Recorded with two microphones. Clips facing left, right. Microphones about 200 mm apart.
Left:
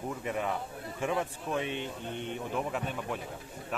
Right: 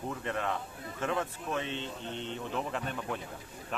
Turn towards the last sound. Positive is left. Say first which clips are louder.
# left 1 dB
turn(degrees=5)  # may be behind; listen again after turning